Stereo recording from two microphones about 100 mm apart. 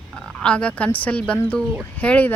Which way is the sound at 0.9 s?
15° left (ahead or behind).